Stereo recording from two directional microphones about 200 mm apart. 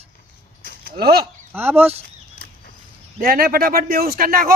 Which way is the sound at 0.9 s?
50° right (ahead or behind).